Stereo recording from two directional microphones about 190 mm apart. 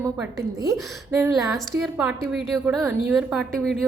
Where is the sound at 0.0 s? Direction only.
15° right (ahead or behind).